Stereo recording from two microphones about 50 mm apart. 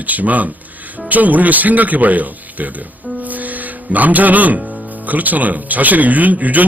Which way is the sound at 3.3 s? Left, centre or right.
Right.